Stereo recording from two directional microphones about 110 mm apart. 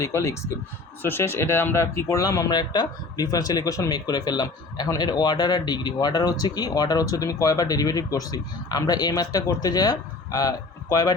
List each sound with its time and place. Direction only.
0.0 s speech: 25° left (ahead or behind)